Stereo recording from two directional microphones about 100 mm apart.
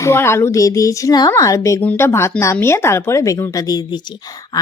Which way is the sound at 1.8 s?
20° left (ahead or behind).